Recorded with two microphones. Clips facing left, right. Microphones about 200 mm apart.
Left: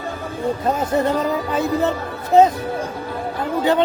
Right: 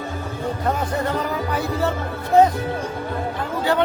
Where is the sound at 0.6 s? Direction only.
25° left (ahead or behind).